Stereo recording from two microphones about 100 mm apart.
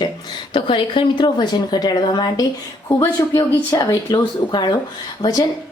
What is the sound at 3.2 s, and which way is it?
Speech, 30° left (ahead or behind).